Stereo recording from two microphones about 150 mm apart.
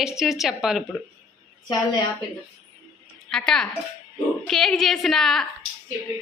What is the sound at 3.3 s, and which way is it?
A woman's voice, 5° left (ahead or behind).